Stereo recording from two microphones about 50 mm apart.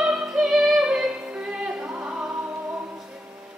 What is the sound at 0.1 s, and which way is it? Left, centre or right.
Music, centre.